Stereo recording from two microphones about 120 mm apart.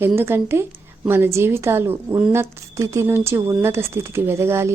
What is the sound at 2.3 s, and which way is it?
Speech, 25° right (ahead or behind).